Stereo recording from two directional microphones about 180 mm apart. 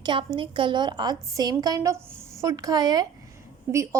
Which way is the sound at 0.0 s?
25° right (ahead or behind).